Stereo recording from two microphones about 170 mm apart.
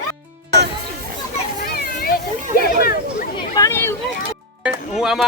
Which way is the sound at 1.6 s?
60° left (ahead or behind).